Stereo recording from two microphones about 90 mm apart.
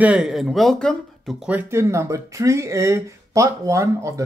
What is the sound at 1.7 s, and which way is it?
Speech, 30° right (ahead or behind).